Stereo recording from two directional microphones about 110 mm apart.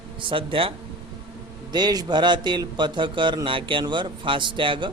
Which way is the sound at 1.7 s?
40° right (ahead or behind).